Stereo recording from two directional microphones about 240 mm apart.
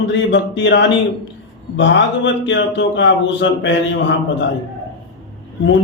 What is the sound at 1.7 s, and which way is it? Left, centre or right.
A man's voice, left.